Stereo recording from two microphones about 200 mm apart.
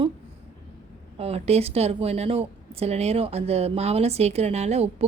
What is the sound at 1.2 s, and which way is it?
Speech, 30° right (ahead or behind).